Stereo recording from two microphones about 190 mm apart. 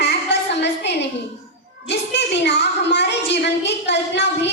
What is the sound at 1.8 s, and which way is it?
A woman's voice, 65° left (ahead or behind).